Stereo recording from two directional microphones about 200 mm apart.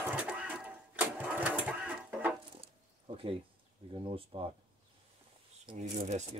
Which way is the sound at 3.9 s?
25° right (ahead or behind).